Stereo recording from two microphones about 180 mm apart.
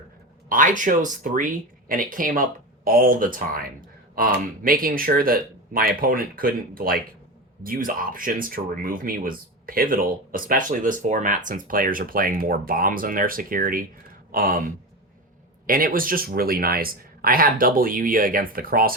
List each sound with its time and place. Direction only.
0.4 s speech: 45° right (ahead or behind)
15.6 s speech: 50° right (ahead or behind)